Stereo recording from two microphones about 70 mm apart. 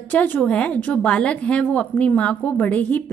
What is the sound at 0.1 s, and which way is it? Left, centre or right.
A woman's voice, left.